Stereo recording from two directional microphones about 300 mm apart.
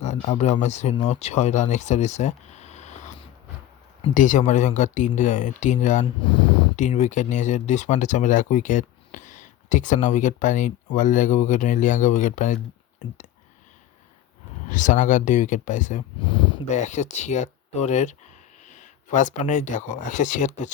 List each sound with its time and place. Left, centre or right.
0.0 s speech: left
14.7 s speech: left